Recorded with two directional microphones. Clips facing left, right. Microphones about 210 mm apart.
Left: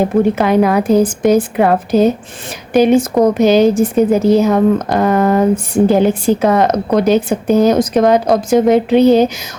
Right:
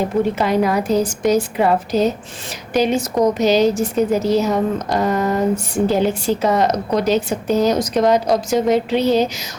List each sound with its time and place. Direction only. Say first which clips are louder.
0.3 s a woman's voice: left 5 dB; 55° left (ahead or behind)